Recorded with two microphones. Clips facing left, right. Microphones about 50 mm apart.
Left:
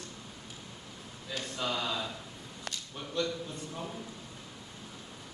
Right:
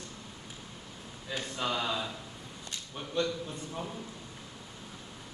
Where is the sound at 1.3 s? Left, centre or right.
Centre.